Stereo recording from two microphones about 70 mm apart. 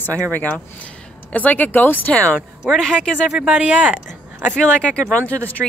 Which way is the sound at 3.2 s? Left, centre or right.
Centre.